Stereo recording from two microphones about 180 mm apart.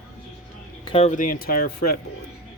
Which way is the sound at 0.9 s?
35° left (ahead or behind).